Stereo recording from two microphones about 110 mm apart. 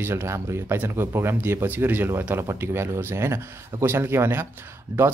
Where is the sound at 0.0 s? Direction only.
25° right (ahead or behind).